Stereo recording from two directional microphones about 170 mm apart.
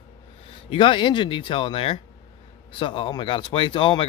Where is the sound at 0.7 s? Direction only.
30° left (ahead or behind).